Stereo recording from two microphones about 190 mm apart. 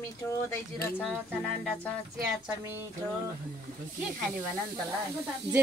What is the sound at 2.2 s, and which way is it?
Speech, 10° right (ahead or behind).